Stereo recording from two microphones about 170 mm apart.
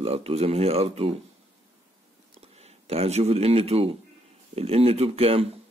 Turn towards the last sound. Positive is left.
turn(degrees=-35)  # may be behind; listen again after turning